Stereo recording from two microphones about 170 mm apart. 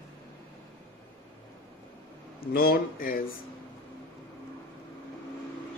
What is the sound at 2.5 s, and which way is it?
Speech, 65° left (ahead or behind).